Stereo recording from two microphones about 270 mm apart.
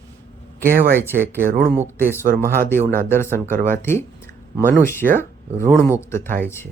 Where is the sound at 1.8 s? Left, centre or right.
Centre.